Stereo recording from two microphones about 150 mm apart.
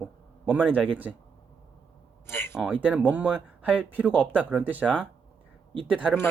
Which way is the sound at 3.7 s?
10° right (ahead or behind).